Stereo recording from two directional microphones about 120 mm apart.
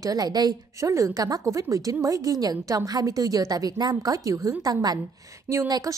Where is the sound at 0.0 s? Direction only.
30° right (ahead or behind).